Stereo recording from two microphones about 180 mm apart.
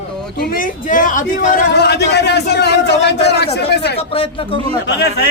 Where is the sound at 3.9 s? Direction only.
30° left (ahead or behind).